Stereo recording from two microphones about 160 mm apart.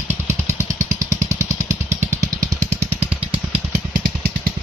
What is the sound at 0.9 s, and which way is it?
Vehicle, 20° right (ahead or behind).